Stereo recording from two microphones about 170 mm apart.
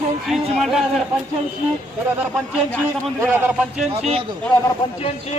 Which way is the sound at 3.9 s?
35° right (ahead or behind).